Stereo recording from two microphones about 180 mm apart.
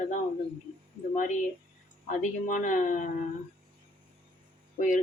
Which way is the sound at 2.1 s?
45° left (ahead or behind).